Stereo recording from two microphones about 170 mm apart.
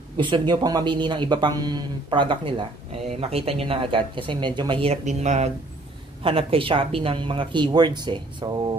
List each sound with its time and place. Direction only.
0.2 s speech: 25° right (ahead or behind); by 5.5 s 45° right (ahead or behind)
6.2 s speech: 30° right (ahead or behind)